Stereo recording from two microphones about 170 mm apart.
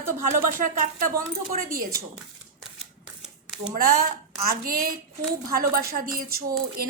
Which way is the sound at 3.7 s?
55° right (ahead or behind).